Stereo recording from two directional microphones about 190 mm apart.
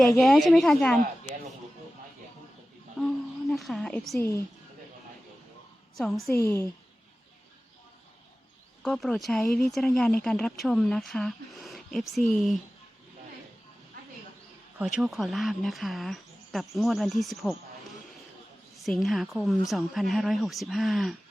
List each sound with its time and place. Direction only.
0.0 s speech: centre (ahead or behind)
3.0 s a sound: centre (ahead or behind)
3.5 s speech: centre (ahead or behind)
4.2 s a woman's voice: 15° left (ahead or behind)
6.0 s speech: centre (ahead or behind)
6.3 s a woman's voice: 15° left (ahead or behind)
8.8 s speech: 5° left (ahead or behind)
14.8 s speech: 5° right (ahead or behind)
18.9 s speech: centre (ahead or behind)